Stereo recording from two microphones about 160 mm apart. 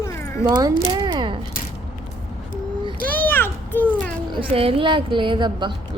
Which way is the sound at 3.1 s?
10° left (ahead or behind).